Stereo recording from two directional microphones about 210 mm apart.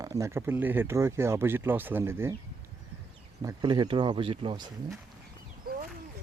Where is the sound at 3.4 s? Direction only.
20° right (ahead or behind).